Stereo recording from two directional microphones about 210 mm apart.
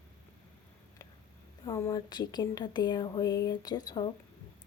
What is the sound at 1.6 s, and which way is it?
Speech, 15° left (ahead or behind).